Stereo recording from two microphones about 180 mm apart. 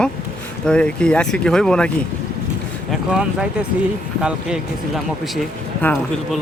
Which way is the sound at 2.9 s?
5° right (ahead or behind).